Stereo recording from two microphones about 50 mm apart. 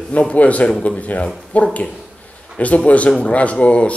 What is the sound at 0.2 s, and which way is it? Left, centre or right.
Speech, left.